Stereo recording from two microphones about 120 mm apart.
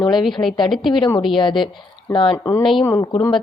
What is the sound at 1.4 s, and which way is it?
Speech, 40° left (ahead or behind).